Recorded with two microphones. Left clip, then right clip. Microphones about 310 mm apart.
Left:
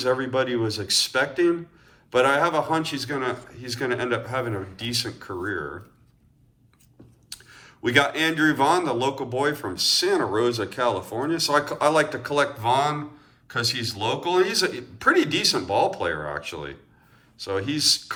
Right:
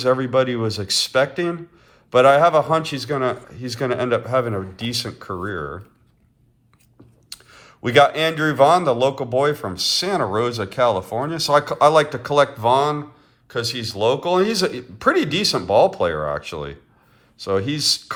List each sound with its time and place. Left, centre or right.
0.0 s a man's voice: right
7.3 s a man's voice: centre